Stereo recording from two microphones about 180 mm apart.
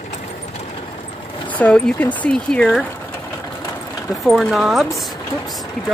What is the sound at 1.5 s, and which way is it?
Speech, 5° left (ahead or behind).